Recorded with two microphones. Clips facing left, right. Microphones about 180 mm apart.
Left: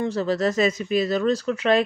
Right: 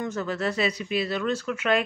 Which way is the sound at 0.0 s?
35° left (ahead or behind).